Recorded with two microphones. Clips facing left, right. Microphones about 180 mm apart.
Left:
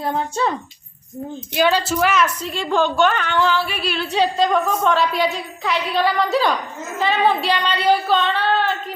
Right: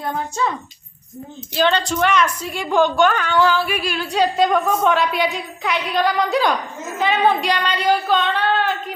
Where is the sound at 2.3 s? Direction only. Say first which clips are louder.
Right 1 dB; 10° right (ahead or behind).